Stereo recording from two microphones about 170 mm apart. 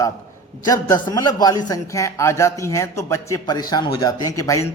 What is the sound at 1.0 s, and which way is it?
A man's voice, 25° left (ahead or behind).